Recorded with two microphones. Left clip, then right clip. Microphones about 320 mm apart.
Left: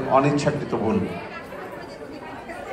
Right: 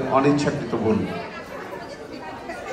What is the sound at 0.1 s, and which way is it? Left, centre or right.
Speech, left.